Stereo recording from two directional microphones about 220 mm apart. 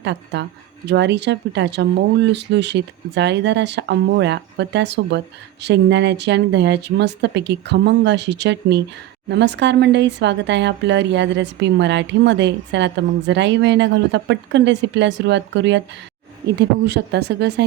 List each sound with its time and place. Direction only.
0.0 s speech: 50° right (ahead or behind)